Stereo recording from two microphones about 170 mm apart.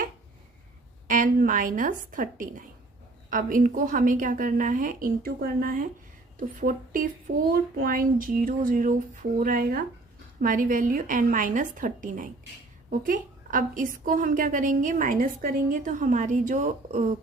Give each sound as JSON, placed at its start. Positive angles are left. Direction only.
{"t": 1.0, "sound": "a woman's voice", "side_deg": -50}